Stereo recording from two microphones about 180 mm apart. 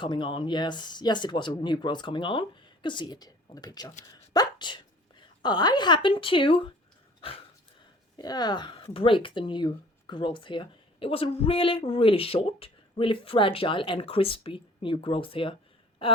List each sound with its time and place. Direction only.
0.0 s speech: 25° left (ahead or behind)
4.1 s a sound: 25° left (ahead or behind)
5.4 s speech: 25° left (ahead or behind)
8.1 s speech: 20° left (ahead or behind)